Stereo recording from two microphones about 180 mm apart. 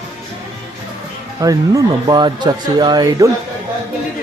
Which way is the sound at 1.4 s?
20° right (ahead or behind).